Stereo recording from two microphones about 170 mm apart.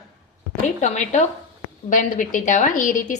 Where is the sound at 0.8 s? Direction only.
45° left (ahead or behind).